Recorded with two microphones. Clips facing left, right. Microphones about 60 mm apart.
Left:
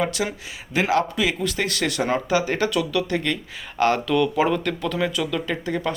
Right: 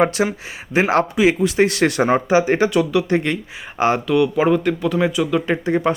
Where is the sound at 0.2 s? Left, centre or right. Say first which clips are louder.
Right 6 dB; right.